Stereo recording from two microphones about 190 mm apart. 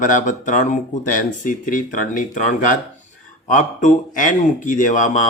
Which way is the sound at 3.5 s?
45° left (ahead or behind).